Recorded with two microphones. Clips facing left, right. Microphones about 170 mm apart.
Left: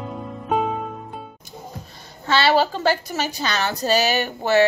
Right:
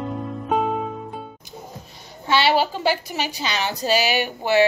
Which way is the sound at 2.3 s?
15° right (ahead or behind).